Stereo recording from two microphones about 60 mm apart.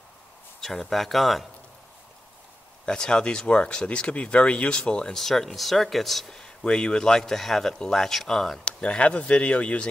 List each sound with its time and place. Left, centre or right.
0.6 s speech: centre
2.8 s speech: centre
8.6 s speech: centre